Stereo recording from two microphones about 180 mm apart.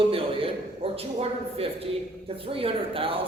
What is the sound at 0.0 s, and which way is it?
A man's voice, 30° right (ahead or behind).